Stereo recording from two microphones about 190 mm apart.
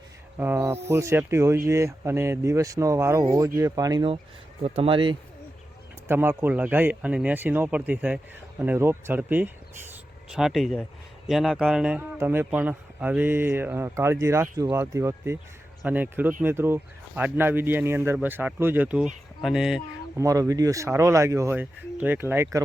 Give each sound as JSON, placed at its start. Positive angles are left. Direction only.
{"t": 0.3, "sound": "a man's voice", "side_deg": -10}
{"t": 6.1, "sound": "a man's voice", "side_deg": -10}
{"t": 20.1, "sound": "a man's voice", "side_deg": -15}